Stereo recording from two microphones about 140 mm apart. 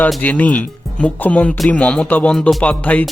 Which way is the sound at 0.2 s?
10° left (ahead or behind).